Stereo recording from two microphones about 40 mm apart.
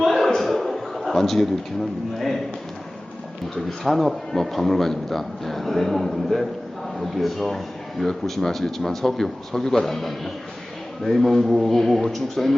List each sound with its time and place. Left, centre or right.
0.0 s a sound: centre
2.1 s a man's voice: centre
3.5 s a man's voice: centre